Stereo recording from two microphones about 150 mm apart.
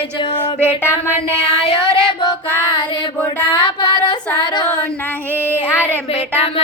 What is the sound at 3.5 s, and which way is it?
Child singing, 30° left (ahead or behind).